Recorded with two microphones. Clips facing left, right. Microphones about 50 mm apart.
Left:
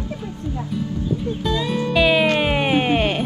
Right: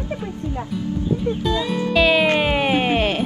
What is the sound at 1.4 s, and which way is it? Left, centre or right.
Speech, centre.